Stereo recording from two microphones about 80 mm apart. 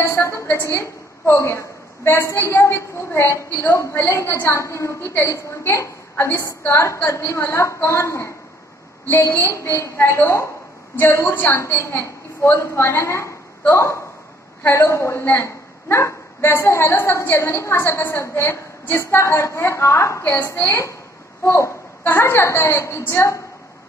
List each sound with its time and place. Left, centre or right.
0.0 s a woman's voice: left